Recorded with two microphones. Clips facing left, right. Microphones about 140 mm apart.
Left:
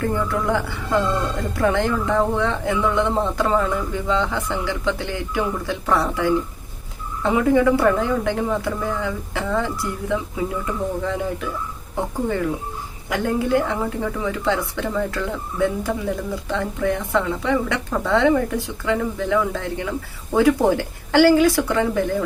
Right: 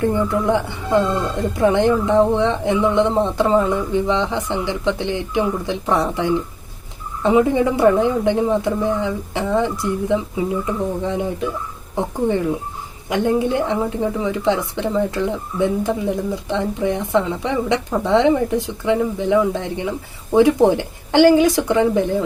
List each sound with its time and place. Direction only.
0.0 s a woman's voice: 20° right (ahead or behind)